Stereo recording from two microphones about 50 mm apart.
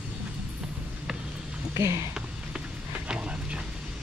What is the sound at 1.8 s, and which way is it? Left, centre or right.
Speech, right.